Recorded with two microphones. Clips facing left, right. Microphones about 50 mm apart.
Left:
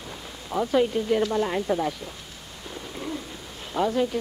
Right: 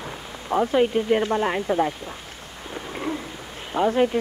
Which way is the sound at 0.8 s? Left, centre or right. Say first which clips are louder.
Right 3 dB; right.